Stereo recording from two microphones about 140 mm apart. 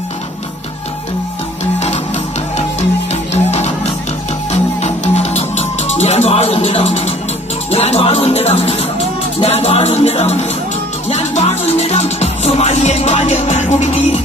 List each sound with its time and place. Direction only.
1.8 s music: 50° left (ahead or behind)
4.8 s music: 50° left (ahead or behind)